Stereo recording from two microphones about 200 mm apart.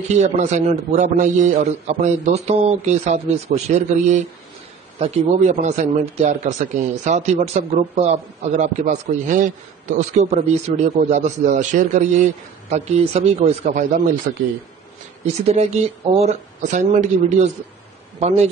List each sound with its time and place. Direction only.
0.1 s speech: 35° right (ahead or behind)